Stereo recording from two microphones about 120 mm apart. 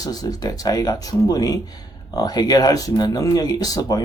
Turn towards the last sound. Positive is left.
turn(degrees=30)  # may be behind; listen again after turning